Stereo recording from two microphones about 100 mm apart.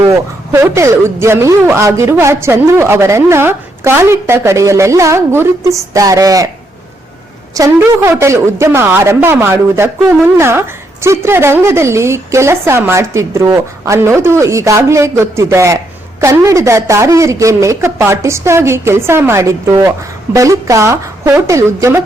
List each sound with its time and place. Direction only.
0.1 s speech: 30° right (ahead or behind)
7.8 s speech: 25° right (ahead or behind)
10.0 s speech: 15° right (ahead or behind)
10.3 s a woman's voice: 25° right (ahead or behind)